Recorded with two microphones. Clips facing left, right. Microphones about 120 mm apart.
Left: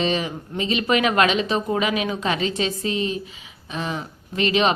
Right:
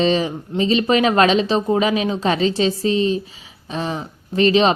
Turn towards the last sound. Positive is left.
turn(degrees=-35)  # may be behind; listen again after turning